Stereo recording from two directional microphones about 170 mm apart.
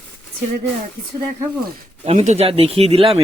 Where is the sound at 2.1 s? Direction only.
40° right (ahead or behind).